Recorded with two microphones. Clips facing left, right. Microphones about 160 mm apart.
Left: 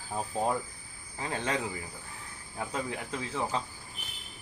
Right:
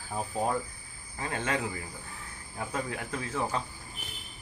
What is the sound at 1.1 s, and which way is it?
Speech, 20° left (ahead or behind).